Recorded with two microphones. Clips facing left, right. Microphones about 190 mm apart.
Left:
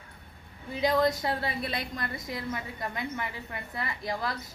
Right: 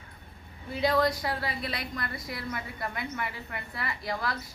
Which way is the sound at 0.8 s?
20° left (ahead or behind).